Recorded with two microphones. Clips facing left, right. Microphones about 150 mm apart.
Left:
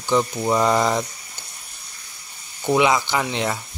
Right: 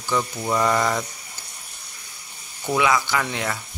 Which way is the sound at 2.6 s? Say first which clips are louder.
Left 3 dB; 20° left (ahead or behind).